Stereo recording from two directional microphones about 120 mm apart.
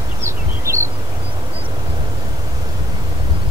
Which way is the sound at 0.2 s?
20° right (ahead or behind).